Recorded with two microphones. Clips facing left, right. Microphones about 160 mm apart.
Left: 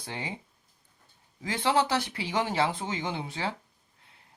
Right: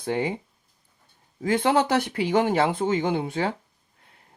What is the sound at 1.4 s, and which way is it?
Speech, 50° right (ahead or behind).